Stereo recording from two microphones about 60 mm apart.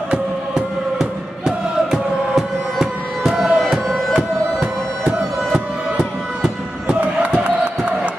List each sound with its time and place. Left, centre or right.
0.1 s music: centre
5.5 s music: centre
7.3 s crowd: centre